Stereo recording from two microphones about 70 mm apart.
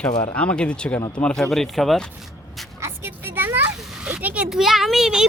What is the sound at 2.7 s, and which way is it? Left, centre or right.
Vehicle, right.